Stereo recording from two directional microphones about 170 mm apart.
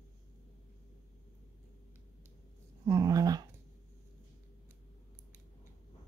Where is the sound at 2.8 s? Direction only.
20° right (ahead or behind).